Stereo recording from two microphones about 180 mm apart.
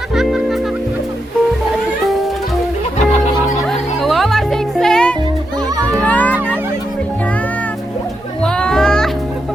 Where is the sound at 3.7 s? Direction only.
Centre (ahead or behind).